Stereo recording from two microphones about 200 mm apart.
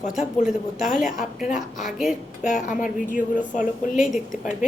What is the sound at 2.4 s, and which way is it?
Speech, 40° left (ahead or behind).